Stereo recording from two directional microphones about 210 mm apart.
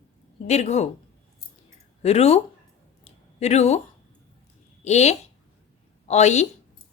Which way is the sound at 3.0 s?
30° left (ahead or behind).